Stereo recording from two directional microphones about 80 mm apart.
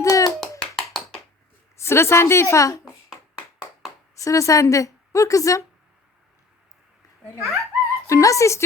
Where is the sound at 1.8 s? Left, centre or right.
Left.